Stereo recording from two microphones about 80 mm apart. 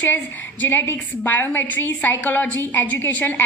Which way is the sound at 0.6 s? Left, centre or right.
Left.